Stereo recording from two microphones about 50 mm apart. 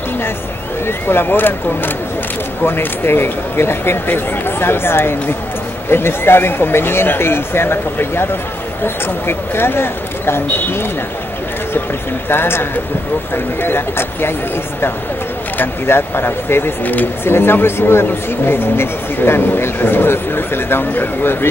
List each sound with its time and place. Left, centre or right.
0.8 s speech: left
12.3 s speech: left
15.5 s speech: left
16.8 s speech: left
17.2 s speech: left